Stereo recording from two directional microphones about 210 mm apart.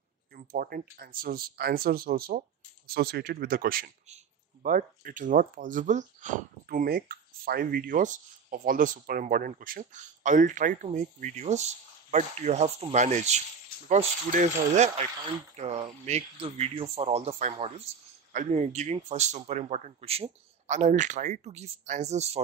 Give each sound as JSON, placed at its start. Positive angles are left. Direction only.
{"t": 0.3, "sound": "speech", "side_deg": -45}